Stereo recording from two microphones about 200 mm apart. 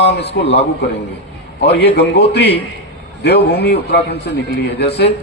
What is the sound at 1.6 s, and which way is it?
A man's voice, 55° left (ahead or behind).